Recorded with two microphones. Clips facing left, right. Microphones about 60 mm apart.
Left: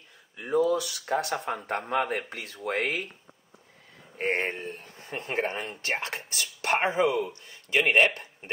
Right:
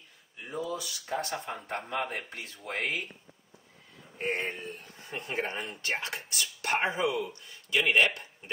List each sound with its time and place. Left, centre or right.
0.4 s speech: left
4.2 s speech: left